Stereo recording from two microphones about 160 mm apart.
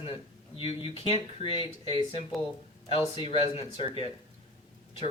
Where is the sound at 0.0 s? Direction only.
35° left (ahead or behind).